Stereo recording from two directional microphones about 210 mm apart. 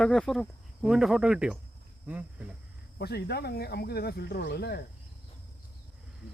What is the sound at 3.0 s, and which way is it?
Speech, 50° left (ahead or behind).